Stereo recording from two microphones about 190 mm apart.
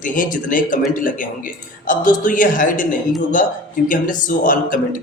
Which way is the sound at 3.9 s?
45° left (ahead or behind).